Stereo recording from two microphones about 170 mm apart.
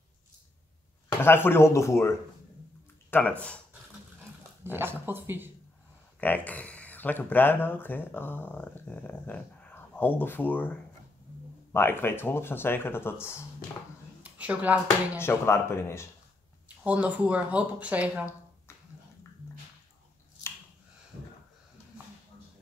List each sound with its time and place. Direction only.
1.2 s speech: 15° left (ahead or behind)
4.6 s speech: 15° right (ahead or behind)
6.2 s speech: 10° left (ahead or behind)
14.4 s speech: 10° right (ahead or behind)
15.1 s speech: 15° left (ahead or behind)
16.6 s speech: 10° right (ahead or behind)